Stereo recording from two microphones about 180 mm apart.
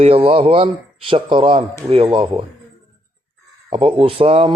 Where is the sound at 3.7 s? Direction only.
30° right (ahead or behind).